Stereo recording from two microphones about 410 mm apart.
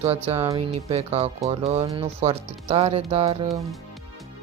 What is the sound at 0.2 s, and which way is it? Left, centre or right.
Speech, centre.